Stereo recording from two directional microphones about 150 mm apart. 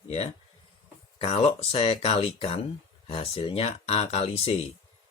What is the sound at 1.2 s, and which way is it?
Speech, 40° left (ahead or behind).